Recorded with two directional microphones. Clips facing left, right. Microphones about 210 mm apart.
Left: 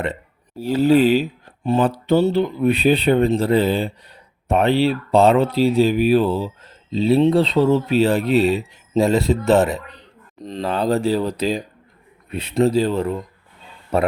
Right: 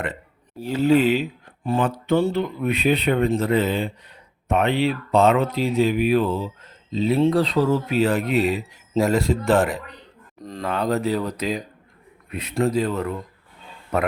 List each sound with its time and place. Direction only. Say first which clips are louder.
0.6 s speech: left 3 dB; 35° left (ahead or behind)